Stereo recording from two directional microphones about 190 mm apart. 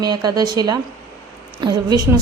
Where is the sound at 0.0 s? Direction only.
20° right (ahead or behind).